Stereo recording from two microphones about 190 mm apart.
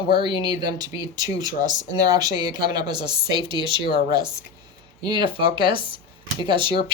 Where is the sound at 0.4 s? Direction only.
20° right (ahead or behind).